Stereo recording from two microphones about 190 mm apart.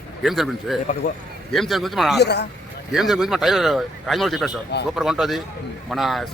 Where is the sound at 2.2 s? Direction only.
60° left (ahead or behind).